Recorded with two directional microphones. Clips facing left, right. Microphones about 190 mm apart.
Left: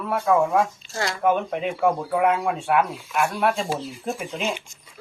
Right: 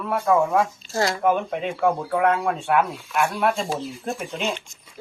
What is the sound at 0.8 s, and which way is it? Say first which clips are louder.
Speech: right 5 dB; 35° right (ahead or behind).